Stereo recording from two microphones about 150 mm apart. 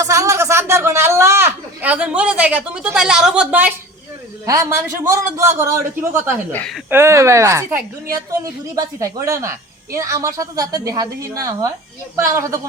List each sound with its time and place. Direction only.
0.0 s speech: 20° right (ahead or behind)
4.4 s a woman's voice: 20° right (ahead or behind)
6.5 s speech: 10° left (ahead or behind)
6.9 s a woman's voice: 20° right (ahead or behind)